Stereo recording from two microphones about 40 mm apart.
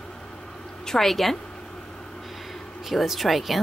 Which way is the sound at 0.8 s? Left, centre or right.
Centre.